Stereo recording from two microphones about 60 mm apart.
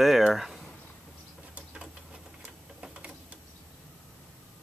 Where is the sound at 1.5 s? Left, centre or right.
Centre.